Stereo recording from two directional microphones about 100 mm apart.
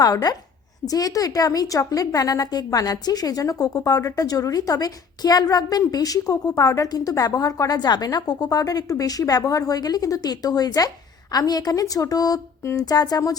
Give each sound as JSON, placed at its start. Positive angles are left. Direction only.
{"t": 0.0, "sound": "a woman's voice", "side_deg": 40}